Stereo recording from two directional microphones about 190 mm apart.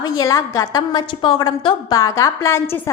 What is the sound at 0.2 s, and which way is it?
A woman's voice, 20° left (ahead or behind).